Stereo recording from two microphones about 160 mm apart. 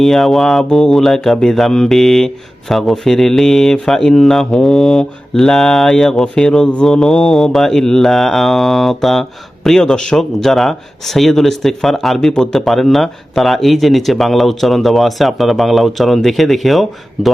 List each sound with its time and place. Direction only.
0.0 s speech: centre (ahead or behind)